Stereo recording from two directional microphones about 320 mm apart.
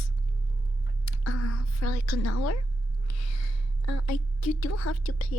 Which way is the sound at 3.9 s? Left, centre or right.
Left.